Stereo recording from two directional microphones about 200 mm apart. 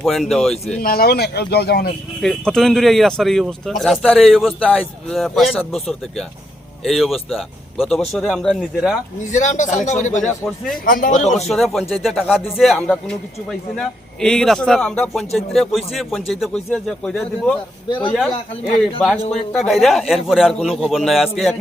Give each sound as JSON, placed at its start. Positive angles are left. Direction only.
{"t": 0.0, "sound": "speech", "side_deg": 0}
{"t": 0.8, "sound": "speech", "side_deg": 45}
{"t": 2.2, "sound": "speech", "side_deg": 0}
{"t": 9.3, "sound": "speech", "side_deg": 40}
{"t": 10.2, "sound": "speech", "side_deg": 5}
{"t": 10.8, "sound": "speech", "side_deg": 45}
{"t": 11.3, "sound": "speech", "side_deg": 0}
{"t": 17.8, "sound": "a man's voice", "side_deg": 25}
{"t": 18.1, "sound": "speech", "side_deg": 0}